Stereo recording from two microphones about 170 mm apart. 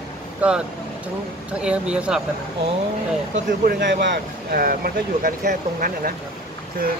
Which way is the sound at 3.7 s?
90° right.